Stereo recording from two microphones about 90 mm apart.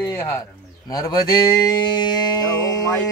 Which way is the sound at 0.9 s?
45° left (ahead or behind).